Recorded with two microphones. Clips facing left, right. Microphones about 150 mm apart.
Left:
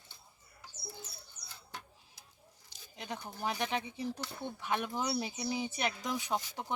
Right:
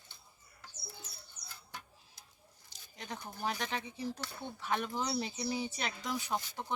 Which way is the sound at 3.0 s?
15° left (ahead or behind).